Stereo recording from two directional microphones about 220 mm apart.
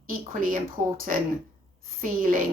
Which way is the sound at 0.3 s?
40° right (ahead or behind).